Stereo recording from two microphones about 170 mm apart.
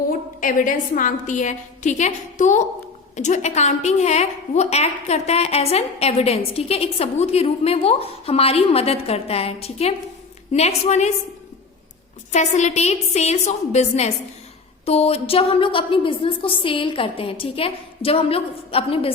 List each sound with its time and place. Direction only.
0.1 s a woman's voice: 50° left (ahead or behind)
12.3 s a woman's voice: 40° left (ahead or behind)